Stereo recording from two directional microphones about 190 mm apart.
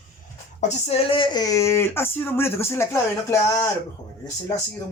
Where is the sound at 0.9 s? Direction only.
30° left (ahead or behind); by 3.7 s 15° left (ahead or behind).